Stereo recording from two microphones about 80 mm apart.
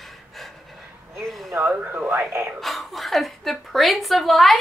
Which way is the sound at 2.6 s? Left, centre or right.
Centre.